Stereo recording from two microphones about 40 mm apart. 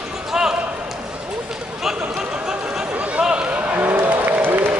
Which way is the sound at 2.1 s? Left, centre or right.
Centre.